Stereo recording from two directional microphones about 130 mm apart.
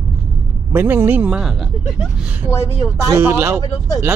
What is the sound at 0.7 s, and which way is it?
Speech, 15° right (ahead or behind).